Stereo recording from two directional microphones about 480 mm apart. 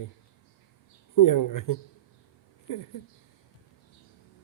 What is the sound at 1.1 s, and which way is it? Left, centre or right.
Speech, left.